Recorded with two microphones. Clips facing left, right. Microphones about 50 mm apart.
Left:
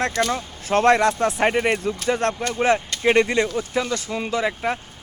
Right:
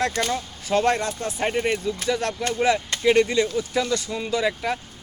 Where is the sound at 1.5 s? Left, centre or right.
Left.